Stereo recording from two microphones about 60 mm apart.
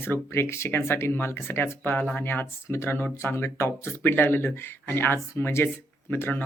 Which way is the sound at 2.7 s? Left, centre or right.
Left.